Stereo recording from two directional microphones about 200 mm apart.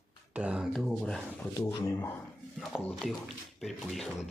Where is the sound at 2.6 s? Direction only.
5° left (ahead or behind).